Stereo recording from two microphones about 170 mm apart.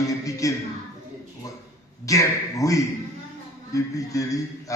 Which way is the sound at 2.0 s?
20° left (ahead or behind).